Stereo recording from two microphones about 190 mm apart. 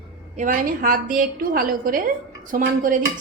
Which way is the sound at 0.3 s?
45° right (ahead or behind).